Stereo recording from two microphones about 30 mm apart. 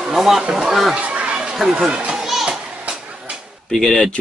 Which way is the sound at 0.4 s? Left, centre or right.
Right.